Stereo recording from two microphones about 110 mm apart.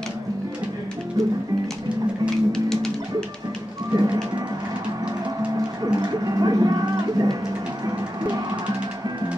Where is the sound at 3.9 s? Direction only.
35° right (ahead or behind).